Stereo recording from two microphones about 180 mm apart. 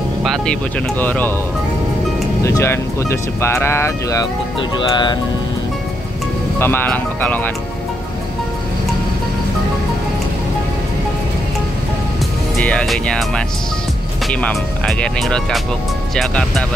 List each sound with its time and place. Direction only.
0.2 s speech: 5° left (ahead or behind)
2.4 s speech: 15° left (ahead or behind)
4.6 s music: 25° left (ahead or behind)
6.6 s speech: 10° left (ahead or behind)
12.6 s speech: 5° left (ahead or behind)